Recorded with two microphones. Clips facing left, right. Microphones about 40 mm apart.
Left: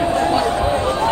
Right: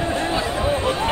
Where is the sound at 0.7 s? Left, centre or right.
Right.